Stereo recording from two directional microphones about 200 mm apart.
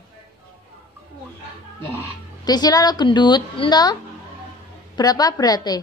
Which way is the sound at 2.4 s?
20° left (ahead or behind).